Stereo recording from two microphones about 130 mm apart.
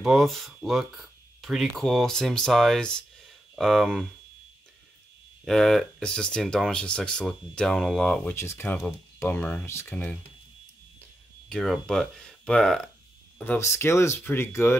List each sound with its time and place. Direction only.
0.0 s speech: centre (ahead or behind)
5.4 s speech: 5° left (ahead or behind)
11.0 s a sound: 5° left (ahead or behind)
13.4 s speech: 20° left (ahead or behind)